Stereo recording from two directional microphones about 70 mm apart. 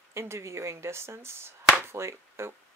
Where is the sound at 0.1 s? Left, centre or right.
Right.